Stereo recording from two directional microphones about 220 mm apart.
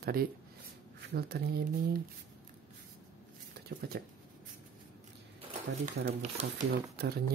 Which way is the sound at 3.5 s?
45° right (ahead or behind).